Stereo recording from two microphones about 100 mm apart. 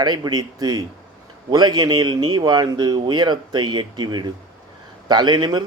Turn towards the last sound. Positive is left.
turn(degrees=-45)  # may be behind; listen again after turning